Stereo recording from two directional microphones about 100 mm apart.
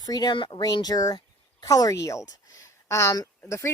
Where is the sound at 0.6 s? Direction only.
40° left (ahead or behind).